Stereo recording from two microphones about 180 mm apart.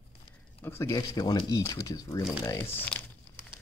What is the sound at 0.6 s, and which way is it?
Speech, 15° left (ahead or behind).